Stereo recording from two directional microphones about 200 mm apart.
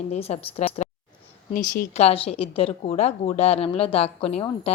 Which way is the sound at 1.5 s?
45° left (ahead or behind).